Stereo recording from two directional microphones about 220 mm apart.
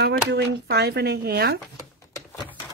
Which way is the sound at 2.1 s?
15° left (ahead or behind).